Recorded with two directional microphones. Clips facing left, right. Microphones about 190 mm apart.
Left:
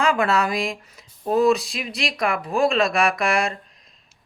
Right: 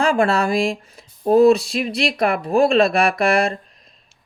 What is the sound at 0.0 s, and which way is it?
Speech, 30° right (ahead or behind).